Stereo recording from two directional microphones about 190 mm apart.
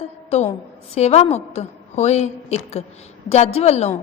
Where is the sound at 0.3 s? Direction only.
35° left (ahead or behind).